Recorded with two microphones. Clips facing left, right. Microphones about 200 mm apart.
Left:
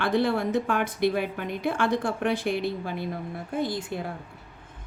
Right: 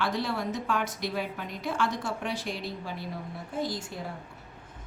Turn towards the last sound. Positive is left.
turn(degrees=60)  # may be behind; listen again after turning